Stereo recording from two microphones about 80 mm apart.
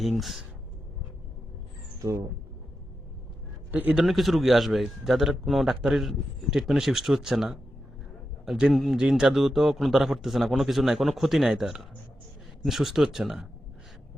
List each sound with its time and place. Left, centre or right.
0.2 s a man's voice: centre
3.7 s a man's voice: right
3.9 s a man's voice: centre